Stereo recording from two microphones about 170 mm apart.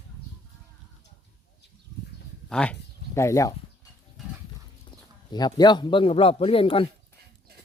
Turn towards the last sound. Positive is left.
turn(degrees=30)  # may be behind; listen again after turning